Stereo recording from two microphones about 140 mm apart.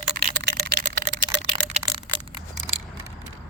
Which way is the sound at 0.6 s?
70° right (ahead or behind).